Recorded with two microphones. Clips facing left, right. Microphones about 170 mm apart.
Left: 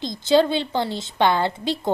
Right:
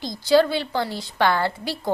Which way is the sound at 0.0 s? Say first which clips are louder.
Even; 20° left (ahead or behind).